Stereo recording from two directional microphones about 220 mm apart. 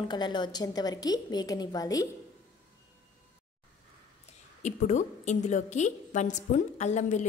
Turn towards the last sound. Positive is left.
turn(degrees=30)  # may be behind; listen again after turning